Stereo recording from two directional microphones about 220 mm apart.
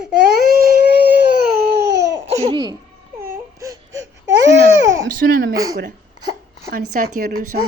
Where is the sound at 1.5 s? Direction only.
50° right (ahead or behind).